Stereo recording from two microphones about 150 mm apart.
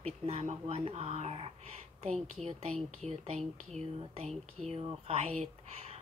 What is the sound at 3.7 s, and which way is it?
Speech, 50° right (ahead or behind).